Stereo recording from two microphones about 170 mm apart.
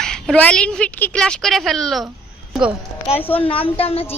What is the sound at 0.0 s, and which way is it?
A woman's voice, 5° left (ahead or behind).